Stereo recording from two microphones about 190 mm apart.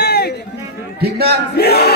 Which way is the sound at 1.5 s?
55° left (ahead or behind).